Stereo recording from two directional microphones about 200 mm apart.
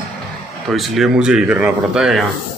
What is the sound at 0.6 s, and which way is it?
A man's voice, centre (ahead or behind).